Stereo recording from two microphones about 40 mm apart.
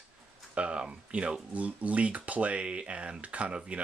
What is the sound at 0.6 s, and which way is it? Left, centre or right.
Speech, right.